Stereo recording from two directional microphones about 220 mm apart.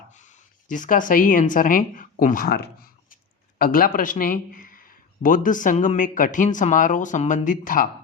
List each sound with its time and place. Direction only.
0.1 s speech: 35° left (ahead or behind)